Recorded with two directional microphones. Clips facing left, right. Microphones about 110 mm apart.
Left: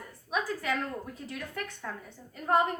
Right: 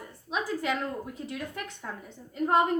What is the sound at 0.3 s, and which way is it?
A woman's voice, 20° right (ahead or behind).